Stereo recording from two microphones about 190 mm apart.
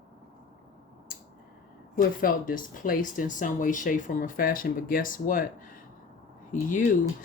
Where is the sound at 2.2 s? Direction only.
50° left (ahead or behind).